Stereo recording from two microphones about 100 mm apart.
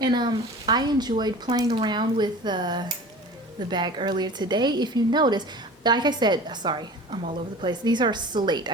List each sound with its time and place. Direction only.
0.0 s a woman's voice: 45° right (ahead or behind)